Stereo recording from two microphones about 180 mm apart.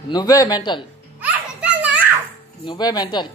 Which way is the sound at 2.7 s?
20° left (ahead or behind).